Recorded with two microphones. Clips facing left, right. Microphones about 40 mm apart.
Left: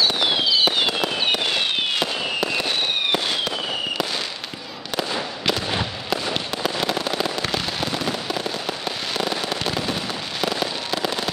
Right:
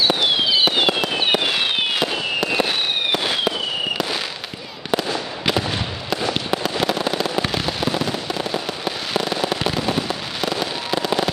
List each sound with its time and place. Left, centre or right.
0.0 s fireworks: centre
4.9 s fireworks: centre
6.6 s fireworks: centre